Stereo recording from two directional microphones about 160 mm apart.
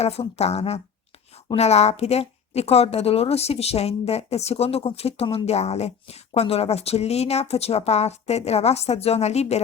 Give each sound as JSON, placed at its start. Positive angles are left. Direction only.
{"t": 0.0, "sound": "a woman's voice", "side_deg": 40}